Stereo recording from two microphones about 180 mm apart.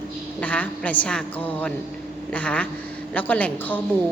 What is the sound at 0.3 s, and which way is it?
A woman's voice, 5° left (ahead or behind).